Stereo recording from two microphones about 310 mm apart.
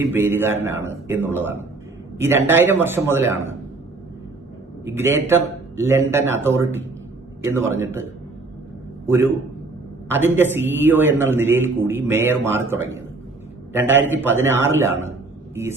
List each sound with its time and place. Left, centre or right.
0.0 s a man's voice: centre
4.9 s speech: centre
9.0 s speech: centre